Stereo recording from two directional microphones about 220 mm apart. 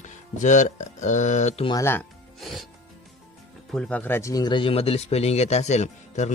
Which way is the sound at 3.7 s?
5° left (ahead or behind).